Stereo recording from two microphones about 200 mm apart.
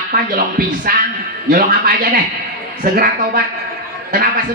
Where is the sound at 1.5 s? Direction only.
45° right (ahead or behind).